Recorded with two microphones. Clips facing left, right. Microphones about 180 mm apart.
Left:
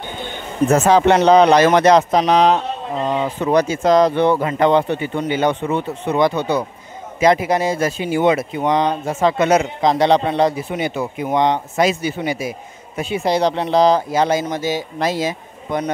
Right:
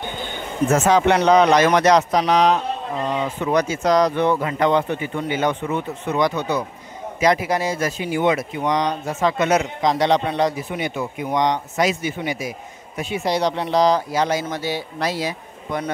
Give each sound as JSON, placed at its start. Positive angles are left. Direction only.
{"t": 0.7, "sound": "speech", "side_deg": 35}